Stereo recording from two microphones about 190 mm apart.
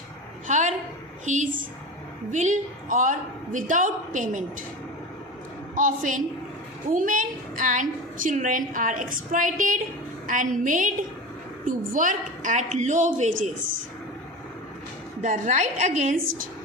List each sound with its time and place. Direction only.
0.4 s a sound: 40° right (ahead or behind)
1.2 s a woman's voice: 40° right (ahead or behind)
5.7 s a woman's voice: 45° right (ahead or behind)
15.2 s a woman's voice: 40° right (ahead or behind)